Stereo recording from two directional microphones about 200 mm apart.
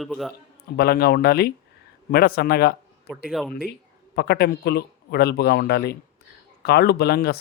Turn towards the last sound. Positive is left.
turn(degrees=50)  # may be behind; listen again after turning